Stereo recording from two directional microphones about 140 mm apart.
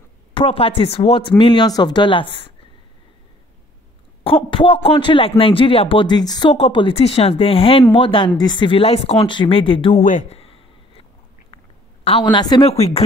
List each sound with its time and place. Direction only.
0.3 s speech: 40° left (ahead or behind)
1.4 s speech: 35° left (ahead or behind)
4.2 s speech: 40° left (ahead or behind)
6.5 s speech: 40° left (ahead or behind)
9.9 s speech: 65° left (ahead or behind)
10.3 s a sound: 45° left (ahead or behind)
12.0 s a woman's voice: 40° left (ahead or behind)